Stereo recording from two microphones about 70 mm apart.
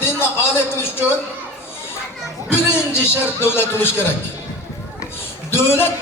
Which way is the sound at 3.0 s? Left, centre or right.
Left.